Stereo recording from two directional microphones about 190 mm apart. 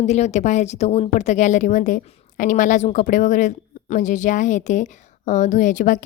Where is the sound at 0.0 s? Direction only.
35° left (ahead or behind).